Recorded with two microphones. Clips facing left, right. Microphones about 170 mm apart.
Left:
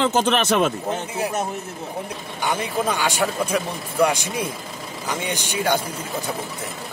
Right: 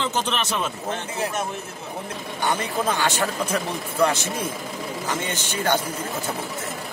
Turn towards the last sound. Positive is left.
turn(degrees=10)  # may be behind; listen again after turning